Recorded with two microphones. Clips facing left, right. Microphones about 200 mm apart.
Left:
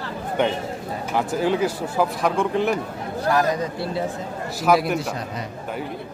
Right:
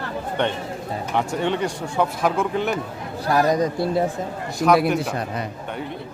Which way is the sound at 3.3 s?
40° right (ahead or behind).